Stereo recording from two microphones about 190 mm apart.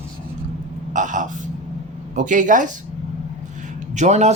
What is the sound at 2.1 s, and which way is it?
Speech, 40° right (ahead or behind).